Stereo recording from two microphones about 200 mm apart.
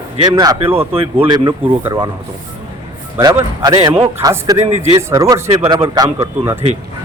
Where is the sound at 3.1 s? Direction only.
15° right (ahead or behind).